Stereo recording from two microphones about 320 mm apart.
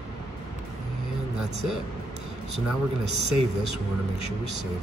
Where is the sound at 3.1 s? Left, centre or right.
Right.